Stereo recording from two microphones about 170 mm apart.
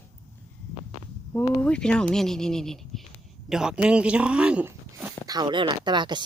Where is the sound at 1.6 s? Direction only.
5° left (ahead or behind).